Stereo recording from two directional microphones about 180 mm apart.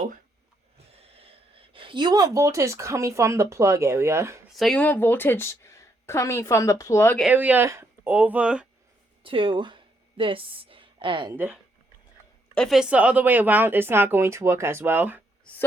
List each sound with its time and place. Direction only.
1.7 s speech: 30° right (ahead or behind)
4.5 s a woman's voice: centre (ahead or behind)
7.2 s speech: 5° right (ahead or behind)
9.2 s speech: 30° right (ahead or behind)
11.3 s speech: 5° right (ahead or behind)